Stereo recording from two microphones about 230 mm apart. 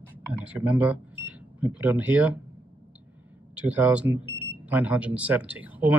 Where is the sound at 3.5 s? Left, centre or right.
Centre.